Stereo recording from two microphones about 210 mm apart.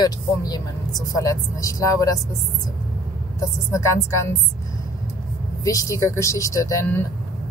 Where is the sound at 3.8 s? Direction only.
15° left (ahead or behind).